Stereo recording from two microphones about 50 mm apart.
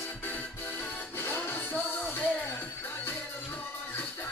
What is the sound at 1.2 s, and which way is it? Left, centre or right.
Music, left.